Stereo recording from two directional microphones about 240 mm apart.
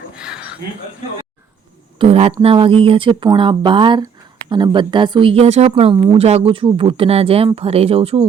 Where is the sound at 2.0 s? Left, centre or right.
Right.